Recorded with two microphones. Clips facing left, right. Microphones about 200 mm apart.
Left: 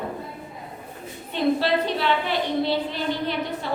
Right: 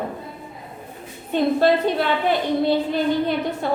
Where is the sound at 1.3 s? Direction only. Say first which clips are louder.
Right 4 dB; 50° right (ahead or behind).